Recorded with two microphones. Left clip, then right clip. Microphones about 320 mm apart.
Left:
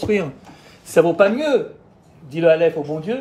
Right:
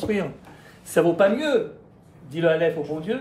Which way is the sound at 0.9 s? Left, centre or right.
Centre.